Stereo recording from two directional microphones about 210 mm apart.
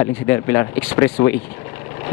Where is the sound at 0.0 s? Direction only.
15° left (ahead or behind).